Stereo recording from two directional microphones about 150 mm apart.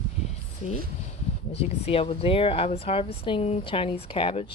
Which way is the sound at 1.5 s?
40° left (ahead or behind).